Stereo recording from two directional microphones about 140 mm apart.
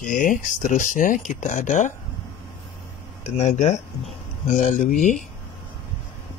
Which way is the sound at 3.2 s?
55° left (ahead or behind).